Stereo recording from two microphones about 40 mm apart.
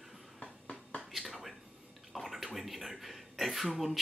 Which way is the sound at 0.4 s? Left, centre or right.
Left.